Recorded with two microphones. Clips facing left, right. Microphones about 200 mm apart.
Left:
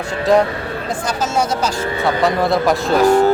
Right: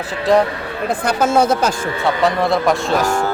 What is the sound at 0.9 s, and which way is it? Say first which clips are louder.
Speech: right 6 dB; 60° right (ahead or behind).